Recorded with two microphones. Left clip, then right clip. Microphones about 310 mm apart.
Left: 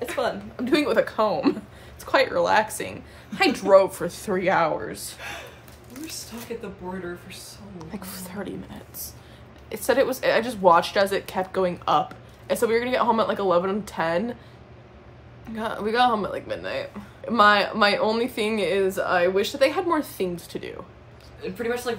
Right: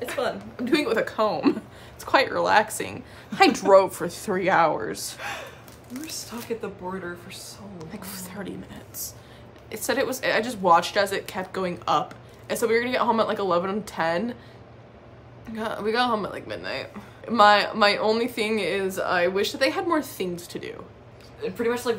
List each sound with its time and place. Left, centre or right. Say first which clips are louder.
0.1 s a woman's voice: left 1 dB; centre
7.8 s a woman's voice: left 1 dB; centre
15.5 s a woman's voice: left 1 dB; centre
21.4 s speech: right 2 dB; centre